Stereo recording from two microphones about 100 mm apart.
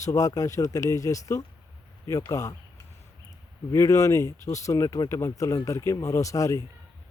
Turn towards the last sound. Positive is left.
turn(degrees=35)  # may be behind; listen again after turning